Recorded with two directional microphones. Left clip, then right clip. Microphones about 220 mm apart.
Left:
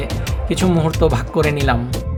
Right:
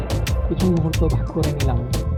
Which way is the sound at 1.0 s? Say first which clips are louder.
Left 11 dB; 30° left (ahead or behind).